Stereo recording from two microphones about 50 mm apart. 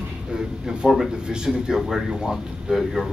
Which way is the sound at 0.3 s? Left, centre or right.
Centre.